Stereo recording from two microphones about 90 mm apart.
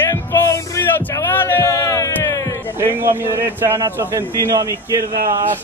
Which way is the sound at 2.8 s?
30° right (ahead or behind).